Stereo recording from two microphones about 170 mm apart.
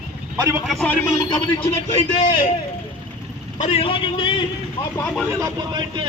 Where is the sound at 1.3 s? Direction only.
35° left (ahead or behind).